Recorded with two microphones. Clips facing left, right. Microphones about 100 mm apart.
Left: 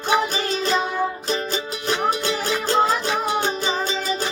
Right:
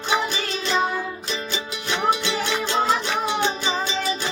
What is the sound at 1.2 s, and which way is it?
Music, 40° left (ahead or behind).